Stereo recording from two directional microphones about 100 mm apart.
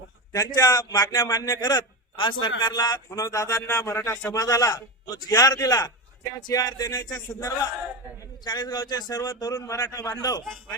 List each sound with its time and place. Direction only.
0.3 s a man's voice: 35° left (ahead or behind)